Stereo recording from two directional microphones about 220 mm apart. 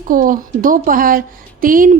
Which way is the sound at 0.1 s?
40° right (ahead or behind).